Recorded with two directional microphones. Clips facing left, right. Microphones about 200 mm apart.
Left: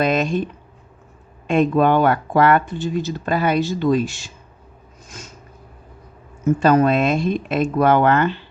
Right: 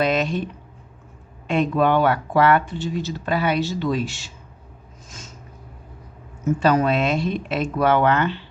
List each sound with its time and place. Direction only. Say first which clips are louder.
0.0 s speech: left 2 dB; 45° left (ahead or behind)
1.5 s speech: left 3 dB; 45° left (ahead or behind)
6.6 s speech: left 3 dB; 50° left (ahead or behind)